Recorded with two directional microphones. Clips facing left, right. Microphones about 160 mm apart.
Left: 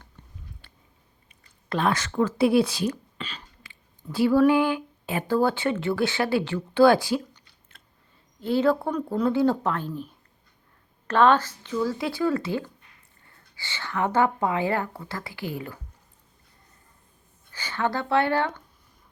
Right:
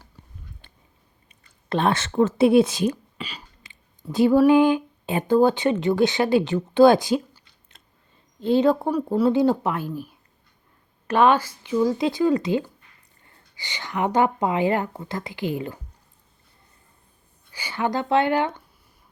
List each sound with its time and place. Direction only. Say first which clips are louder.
0.6 s a sound: right 1 dB; 20° right (ahead or behind)
1.3 s speech: right 4 dB; 25° right (ahead or behind)
7.7 s chewing: even; 20° right (ahead or behind)
8.4 s a woman's voice: right 3 dB; 20° right (ahead or behind)
11.1 s a woman's voice: right 1 dB; 10° right (ahead or behind)
17.5 s a woman's voice: right 2 dB; 10° right (ahead or behind)